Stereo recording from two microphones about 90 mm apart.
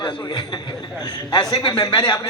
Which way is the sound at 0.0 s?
55° left (ahead or behind).